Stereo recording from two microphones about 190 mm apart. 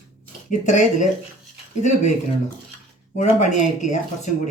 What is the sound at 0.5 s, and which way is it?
Speech, 40° left (ahead or behind).